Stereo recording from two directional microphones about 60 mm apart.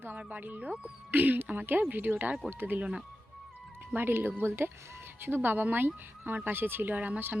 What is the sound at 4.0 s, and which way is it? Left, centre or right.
Speech, right.